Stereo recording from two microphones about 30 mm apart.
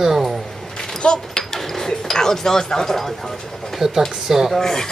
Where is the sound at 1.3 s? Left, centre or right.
Centre.